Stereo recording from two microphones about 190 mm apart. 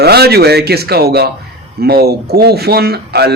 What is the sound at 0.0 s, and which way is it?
A man's voice, 55° right (ahead or behind).